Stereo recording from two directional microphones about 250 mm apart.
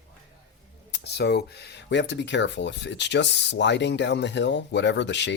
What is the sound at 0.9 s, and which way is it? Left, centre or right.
Speech, left.